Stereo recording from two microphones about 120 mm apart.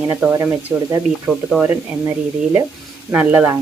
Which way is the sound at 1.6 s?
20° right (ahead or behind).